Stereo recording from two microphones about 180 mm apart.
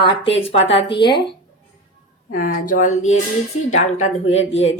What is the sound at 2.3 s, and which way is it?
Speech, 50° left (ahead or behind).